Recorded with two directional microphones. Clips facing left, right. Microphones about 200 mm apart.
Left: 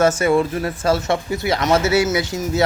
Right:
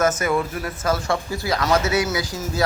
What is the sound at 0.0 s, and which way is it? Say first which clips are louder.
Speech: left 5 dB; 30° left (ahead or behind).